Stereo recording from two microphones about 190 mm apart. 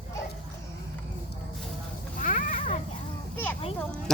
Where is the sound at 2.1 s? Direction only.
45° left (ahead or behind).